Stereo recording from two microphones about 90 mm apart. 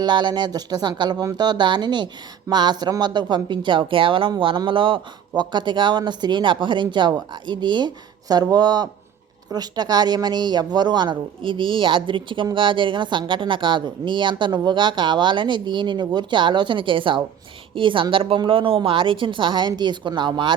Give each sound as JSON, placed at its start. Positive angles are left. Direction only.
{"t": 0.0, "sound": "a woman's voice", "side_deg": -55}
{"t": 5.4, "sound": "a woman's voice", "side_deg": -55}